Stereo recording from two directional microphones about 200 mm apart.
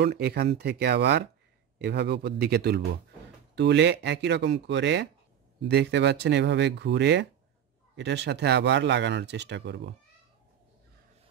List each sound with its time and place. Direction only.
0.0 s a man's voice: 55° right (ahead or behind)